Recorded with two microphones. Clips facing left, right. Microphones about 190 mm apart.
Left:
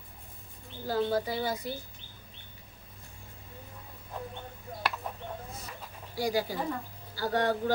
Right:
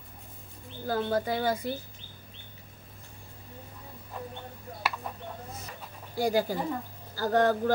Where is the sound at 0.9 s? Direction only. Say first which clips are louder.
Right 1 dB; 50° right (ahead or behind).